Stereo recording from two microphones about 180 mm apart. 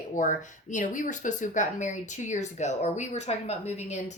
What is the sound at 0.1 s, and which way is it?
Speech, 45° left (ahead or behind).